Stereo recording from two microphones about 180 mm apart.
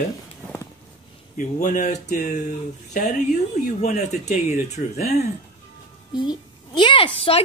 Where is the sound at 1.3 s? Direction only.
45° left (ahead or behind).